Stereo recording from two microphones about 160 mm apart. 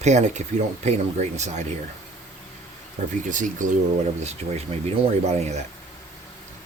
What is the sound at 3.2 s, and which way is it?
Speech, 50° right (ahead or behind).